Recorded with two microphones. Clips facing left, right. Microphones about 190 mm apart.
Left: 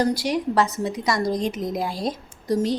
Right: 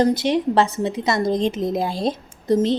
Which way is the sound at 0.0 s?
25° right (ahead or behind).